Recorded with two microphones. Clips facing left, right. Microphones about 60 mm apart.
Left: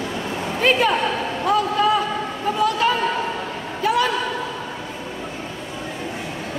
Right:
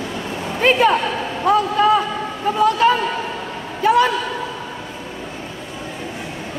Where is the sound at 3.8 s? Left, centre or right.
Right.